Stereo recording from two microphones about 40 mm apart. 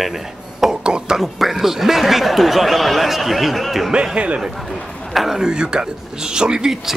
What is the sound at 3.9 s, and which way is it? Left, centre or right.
Speech, right.